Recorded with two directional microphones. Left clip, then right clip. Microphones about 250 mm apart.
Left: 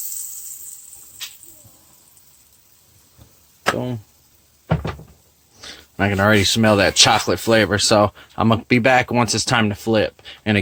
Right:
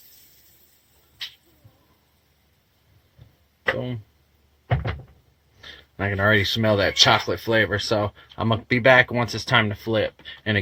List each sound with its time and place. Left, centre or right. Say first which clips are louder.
5.6 s speech: left 6 dB; left